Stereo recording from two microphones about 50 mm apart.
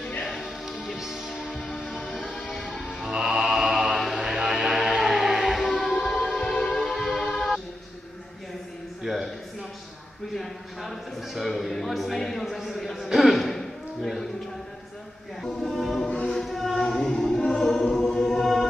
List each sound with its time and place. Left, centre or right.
0.4 s music: centre
1.7 s music: centre
2.4 s music: centre
3.1 s mantra: centre
4.5 s music: centre
9.0 s a sound: centre
15.4 s music: centre